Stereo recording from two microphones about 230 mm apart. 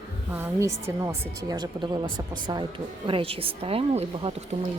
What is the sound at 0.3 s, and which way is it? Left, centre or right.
A woman's voice, centre.